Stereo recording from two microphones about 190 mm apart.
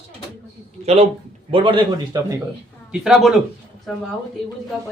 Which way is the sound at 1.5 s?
25° right (ahead or behind).